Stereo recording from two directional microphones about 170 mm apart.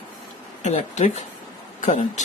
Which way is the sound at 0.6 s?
45° left (ahead or behind).